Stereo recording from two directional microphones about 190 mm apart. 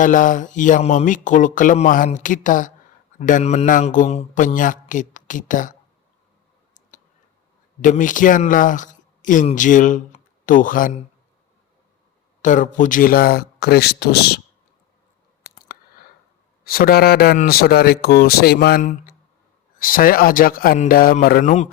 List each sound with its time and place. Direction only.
0.0 s speech: 45° left (ahead or behind)
7.8 s speech: 45° left (ahead or behind)
12.4 s speech: 40° left (ahead or behind); by 14.4 s 55° left (ahead or behind)
15.5 s chewing: 50° left (ahead or behind)
16.6 s speech: 50° left (ahead or behind)